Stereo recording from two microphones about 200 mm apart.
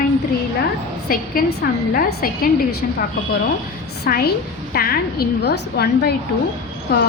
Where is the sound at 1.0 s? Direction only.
45° left (ahead or behind).